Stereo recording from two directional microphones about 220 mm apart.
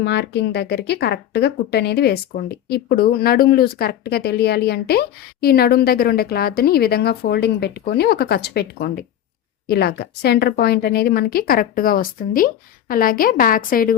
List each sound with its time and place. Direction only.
0.0 s a woman's voice: 50° left (ahead or behind)